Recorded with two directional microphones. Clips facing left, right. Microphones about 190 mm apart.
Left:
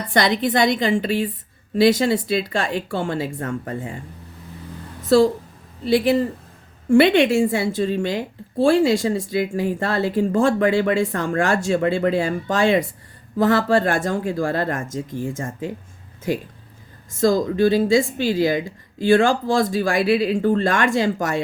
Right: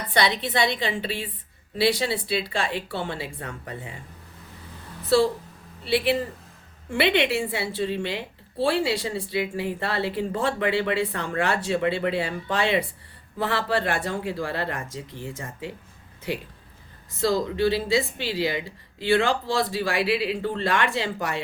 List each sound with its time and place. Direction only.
0.1 s a woman's voice: 45° left (ahead or behind)
5.0 s a woman's voice: 45° left (ahead or behind)